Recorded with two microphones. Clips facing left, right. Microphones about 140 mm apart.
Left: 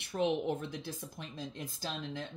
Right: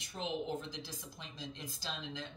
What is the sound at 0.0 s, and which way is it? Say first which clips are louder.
Speech: left 8 dB; 60° left (ahead or behind).